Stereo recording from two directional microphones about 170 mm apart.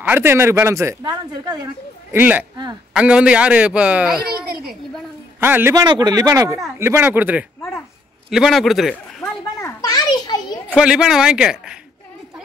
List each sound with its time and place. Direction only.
0.0 s speech: 10° right (ahead or behind)
2.1 s speech: 10° right (ahead or behind)
5.4 s speech: 10° right (ahead or behind)
5.9 s speech: 25° right (ahead or behind); by 9.3 s centre (ahead or behind)
9.6 s children playing: 20° left (ahead or behind)
10.7 s speech: 5° right (ahead or behind)